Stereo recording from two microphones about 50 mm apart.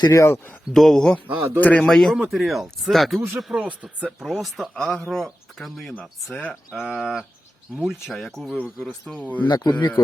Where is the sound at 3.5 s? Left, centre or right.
Right.